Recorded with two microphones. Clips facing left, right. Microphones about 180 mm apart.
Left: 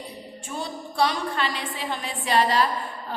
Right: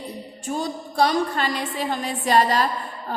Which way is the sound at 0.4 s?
40° right (ahead or behind).